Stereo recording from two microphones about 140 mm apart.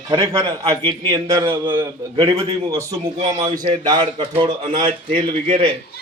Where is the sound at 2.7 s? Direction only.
25° right (ahead or behind).